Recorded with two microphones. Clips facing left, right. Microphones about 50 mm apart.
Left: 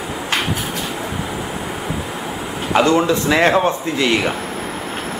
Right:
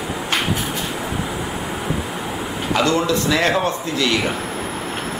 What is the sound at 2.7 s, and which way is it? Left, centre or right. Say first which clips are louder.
Speech: left 4 dB; left.